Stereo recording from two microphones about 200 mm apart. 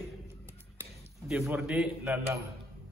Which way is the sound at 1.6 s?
Centre (ahead or behind).